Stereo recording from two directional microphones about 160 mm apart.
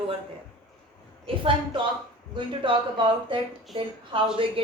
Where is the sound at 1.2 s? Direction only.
35° right (ahead or behind).